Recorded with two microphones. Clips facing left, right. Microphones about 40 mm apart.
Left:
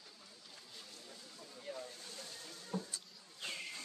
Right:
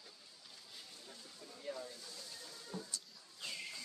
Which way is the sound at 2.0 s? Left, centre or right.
Left.